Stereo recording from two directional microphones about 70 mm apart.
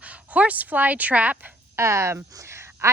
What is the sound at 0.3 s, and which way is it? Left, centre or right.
Speech, right.